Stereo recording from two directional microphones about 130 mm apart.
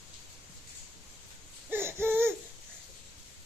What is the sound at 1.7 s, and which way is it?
Hoot, 20° right (ahead or behind).